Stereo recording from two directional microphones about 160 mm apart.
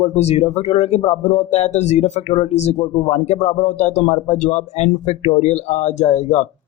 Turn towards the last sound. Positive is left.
turn(degrees=45)  # may be behind; listen again after turning